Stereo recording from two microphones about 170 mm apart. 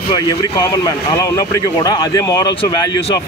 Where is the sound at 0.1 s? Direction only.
20° left (ahead or behind).